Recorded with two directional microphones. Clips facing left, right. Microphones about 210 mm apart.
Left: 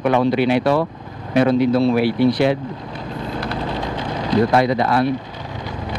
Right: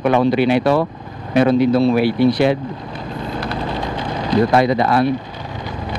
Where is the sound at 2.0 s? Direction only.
10° right (ahead or behind).